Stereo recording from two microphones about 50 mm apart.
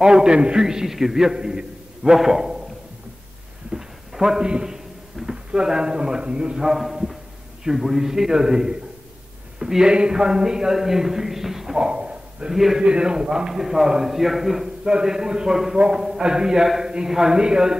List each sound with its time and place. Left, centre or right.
0.0 s a man's voice: centre
3.7 s a man's voice: centre
11.9 s a sound: centre
12.5 s a man's voice: centre
12.8 s a man's voice: centre